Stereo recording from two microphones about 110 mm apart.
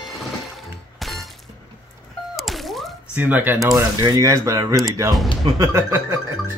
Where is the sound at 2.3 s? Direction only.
Centre (ahead or behind).